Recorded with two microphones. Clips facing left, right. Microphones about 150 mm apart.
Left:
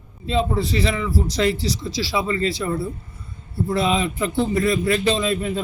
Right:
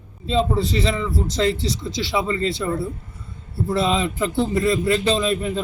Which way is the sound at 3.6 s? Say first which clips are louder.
Even; centre (ahead or behind).